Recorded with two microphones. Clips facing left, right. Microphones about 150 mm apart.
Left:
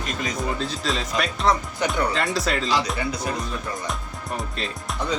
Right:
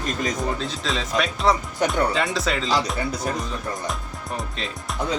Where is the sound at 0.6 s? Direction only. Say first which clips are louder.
Even; centre (ahead or behind).